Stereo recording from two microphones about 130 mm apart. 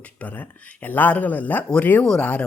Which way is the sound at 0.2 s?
10° left (ahead or behind).